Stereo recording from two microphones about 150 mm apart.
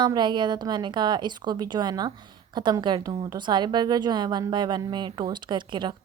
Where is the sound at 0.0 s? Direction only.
30° right (ahead or behind).